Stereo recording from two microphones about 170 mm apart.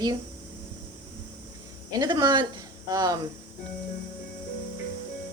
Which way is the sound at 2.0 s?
25° right (ahead or behind).